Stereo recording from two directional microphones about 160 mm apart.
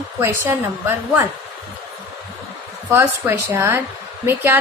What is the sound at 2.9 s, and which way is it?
Speech, 15° right (ahead or behind).